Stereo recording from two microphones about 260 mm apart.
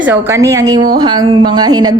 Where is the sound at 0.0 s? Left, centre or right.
Centre.